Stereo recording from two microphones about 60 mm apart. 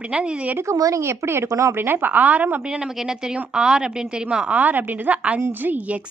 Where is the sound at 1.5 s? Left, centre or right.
Right.